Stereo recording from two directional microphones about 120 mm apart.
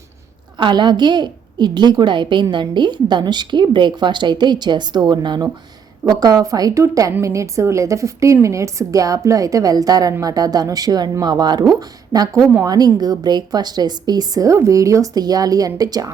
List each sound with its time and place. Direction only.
0.6 s a woman's voice: 40° right (ahead or behind)